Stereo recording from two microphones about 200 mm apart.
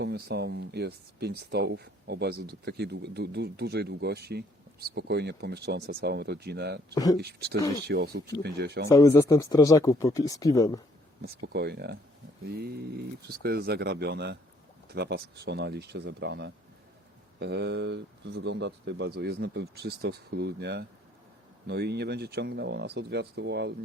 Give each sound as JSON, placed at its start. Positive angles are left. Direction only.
{"t": 0.0, "sound": "speech", "side_deg": -55}
{"t": 6.9, "sound": "speech", "side_deg": 20}
{"t": 7.2, "sound": "speech", "side_deg": -55}
{"t": 7.6, "sound": "speech", "side_deg": 15}
{"t": 7.9, "sound": "speech", "side_deg": -50}
{"t": 8.9, "sound": "speech", "side_deg": 15}
{"t": 11.2, "sound": "speech", "side_deg": -50}